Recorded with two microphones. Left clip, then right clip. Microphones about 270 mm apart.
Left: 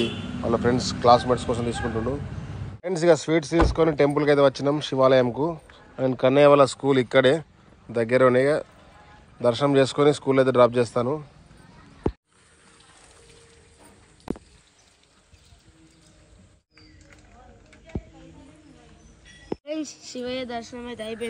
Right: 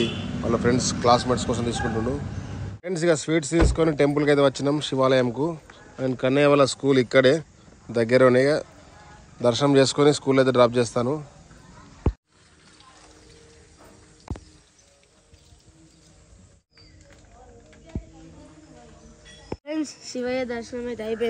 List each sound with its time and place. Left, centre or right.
0.0 s a sound: centre
1.0 s speech: centre
17.9 s music: left
19.6 s speech: centre